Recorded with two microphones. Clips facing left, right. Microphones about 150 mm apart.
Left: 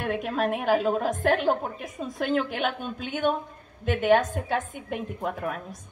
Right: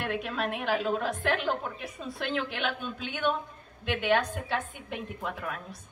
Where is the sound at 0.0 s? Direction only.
45° left (ahead or behind).